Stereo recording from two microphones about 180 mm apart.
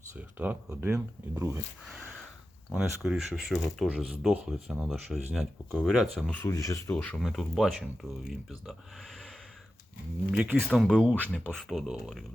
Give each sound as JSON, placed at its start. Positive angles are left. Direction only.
{"t": 0.1, "sound": "speech", "side_deg": -10}
{"t": 1.9, "sound": "a sound", "side_deg": 0}
{"t": 2.7, "sound": "speech", "side_deg": -5}
{"t": 6.4, "sound": "speech", "side_deg": 20}
{"t": 6.9, "sound": "speech", "side_deg": 5}
{"t": 10.3, "sound": "speech", "side_deg": -5}